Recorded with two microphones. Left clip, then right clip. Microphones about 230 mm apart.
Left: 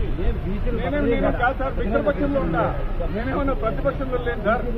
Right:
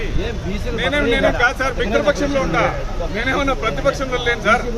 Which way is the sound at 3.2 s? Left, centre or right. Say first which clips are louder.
Right 6 dB; right.